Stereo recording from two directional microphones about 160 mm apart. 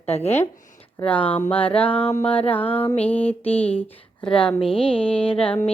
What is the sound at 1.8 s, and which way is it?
Music, 10° left (ahead or behind).